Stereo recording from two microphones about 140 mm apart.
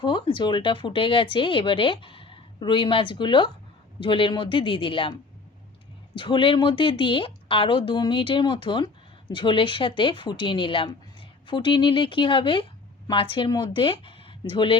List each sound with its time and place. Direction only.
0.0 s speech: 35° left (ahead or behind)
6.1 s speech: 35° left (ahead or behind)